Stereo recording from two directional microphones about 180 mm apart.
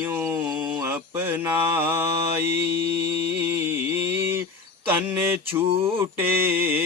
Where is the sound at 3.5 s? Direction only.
10° right (ahead or behind).